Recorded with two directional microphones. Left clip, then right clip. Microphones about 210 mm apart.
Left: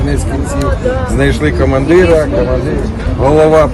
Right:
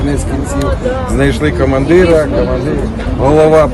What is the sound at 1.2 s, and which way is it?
Speech, centre (ahead or behind).